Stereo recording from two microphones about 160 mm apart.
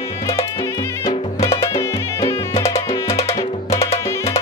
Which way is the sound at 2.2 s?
40° left (ahead or behind).